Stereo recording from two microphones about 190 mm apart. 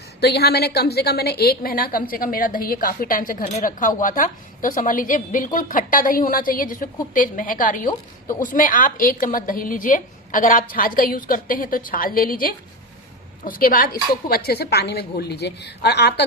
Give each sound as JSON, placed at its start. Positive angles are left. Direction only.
{"t": 0.2, "sound": "a woman's voice", "side_deg": 60}